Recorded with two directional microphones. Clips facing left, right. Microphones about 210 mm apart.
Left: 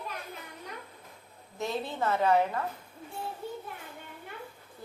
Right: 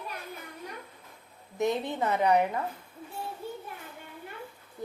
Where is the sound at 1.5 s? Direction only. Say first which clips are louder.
Right 4 dB; 20° right (ahead or behind).